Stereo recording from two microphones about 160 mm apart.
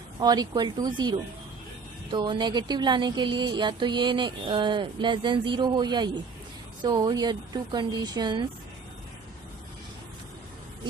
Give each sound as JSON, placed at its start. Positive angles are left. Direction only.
{"t": 0.2, "sound": "speech", "side_deg": -25}